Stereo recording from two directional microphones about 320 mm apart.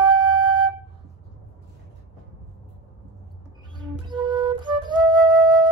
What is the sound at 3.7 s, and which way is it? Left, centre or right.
Flute, centre.